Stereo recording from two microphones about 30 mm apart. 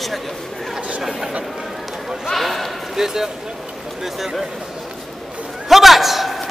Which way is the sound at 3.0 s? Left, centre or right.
Centre.